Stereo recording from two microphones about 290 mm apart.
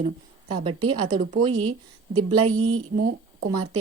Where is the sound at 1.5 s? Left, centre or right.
Right.